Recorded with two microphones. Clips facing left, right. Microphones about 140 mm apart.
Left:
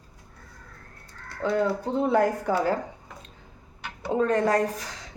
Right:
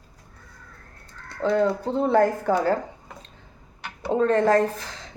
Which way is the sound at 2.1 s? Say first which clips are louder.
Right 4 dB; 15° left (ahead or behind).